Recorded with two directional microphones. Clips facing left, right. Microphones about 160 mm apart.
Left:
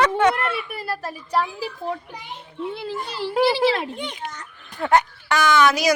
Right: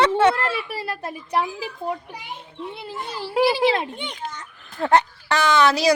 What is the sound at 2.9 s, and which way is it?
A child's voice, 20° right (ahead or behind).